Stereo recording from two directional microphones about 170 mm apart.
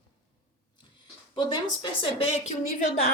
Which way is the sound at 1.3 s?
25° left (ahead or behind).